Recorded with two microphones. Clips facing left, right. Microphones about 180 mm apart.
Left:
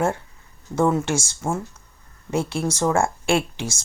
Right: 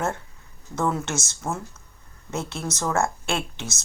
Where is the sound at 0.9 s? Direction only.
10° left (ahead or behind).